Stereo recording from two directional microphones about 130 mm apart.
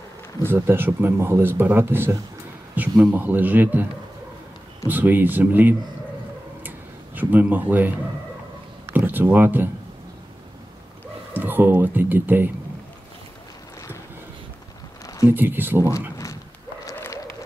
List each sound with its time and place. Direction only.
0.4 s speech: 15° right (ahead or behind)
4.8 s speech: 15° right (ahead or behind)
7.2 s speech: 15° right (ahead or behind)
11.3 s speech: 15° right (ahead or behind)
15.2 s speech: 15° right (ahead or behind)
16.9 s a sound: 20° left (ahead or behind)